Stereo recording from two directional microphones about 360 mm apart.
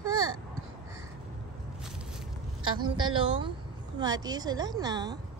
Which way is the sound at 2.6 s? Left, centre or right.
Centre.